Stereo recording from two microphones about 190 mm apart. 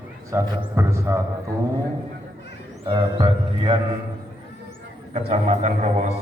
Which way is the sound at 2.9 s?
25° right (ahead or behind).